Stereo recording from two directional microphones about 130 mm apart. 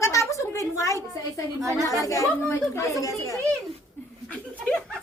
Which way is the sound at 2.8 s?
25° left (ahead or behind).